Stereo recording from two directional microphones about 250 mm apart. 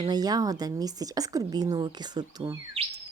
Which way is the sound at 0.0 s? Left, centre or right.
Centre.